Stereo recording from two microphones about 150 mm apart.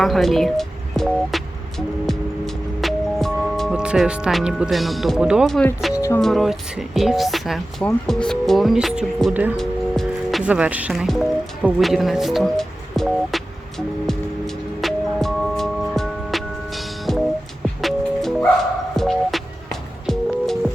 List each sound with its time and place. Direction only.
0.0 s speech: centre (ahead or behind)
2.0 s music: centre (ahead or behind)
6.0 s speech: 20° left (ahead or behind)
6.2 s speech: centre (ahead or behind)
9.6 s music: centre (ahead or behind)
10.4 s music: 10° right (ahead or behind)